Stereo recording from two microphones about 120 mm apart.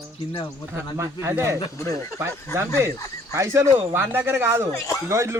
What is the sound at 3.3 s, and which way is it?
Speech, 25° right (ahead or behind).